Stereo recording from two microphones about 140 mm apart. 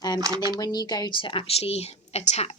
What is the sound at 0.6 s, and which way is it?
Speech, 30° left (ahead or behind).